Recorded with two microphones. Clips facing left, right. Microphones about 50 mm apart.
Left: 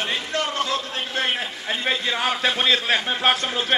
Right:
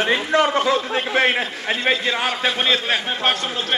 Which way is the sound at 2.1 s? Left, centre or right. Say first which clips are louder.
Right 1 dB; centre.